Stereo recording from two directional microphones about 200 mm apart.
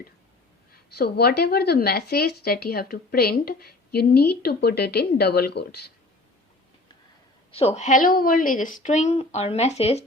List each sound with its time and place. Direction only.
0.7 s speech: 50° left (ahead or behind)
7.5 s speech: 30° left (ahead or behind)